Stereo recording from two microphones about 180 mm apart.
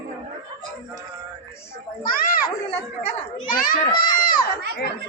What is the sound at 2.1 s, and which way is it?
Speech, 55° left (ahead or behind).